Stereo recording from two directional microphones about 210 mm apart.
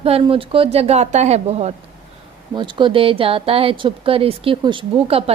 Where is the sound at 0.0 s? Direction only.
25° right (ahead or behind).